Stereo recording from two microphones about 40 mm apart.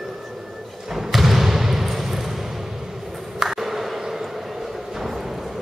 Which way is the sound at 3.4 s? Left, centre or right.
Centre.